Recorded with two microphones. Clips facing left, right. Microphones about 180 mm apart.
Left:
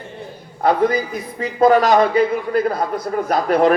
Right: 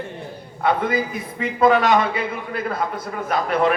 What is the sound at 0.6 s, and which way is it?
A man's voice, 40° left (ahead or behind).